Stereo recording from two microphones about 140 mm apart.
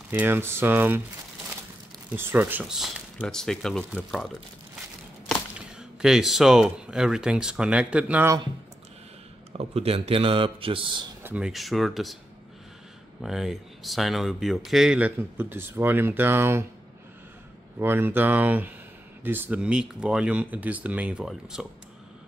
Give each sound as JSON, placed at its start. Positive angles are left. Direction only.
{"t": 0.1, "sound": "speech", "side_deg": -15}
{"t": 2.1, "sound": "speech", "side_deg": -15}
{"t": 2.6, "sound": "speech", "side_deg": -5}
{"t": 5.8, "sound": "speech", "side_deg": -5}
{"t": 9.6, "sound": "speech", "side_deg": -45}
{"t": 11.2, "sound": "speech", "side_deg": -5}
{"t": 13.2, "sound": "speech", "side_deg": 0}
{"t": 17.7, "sound": "speech", "side_deg": -15}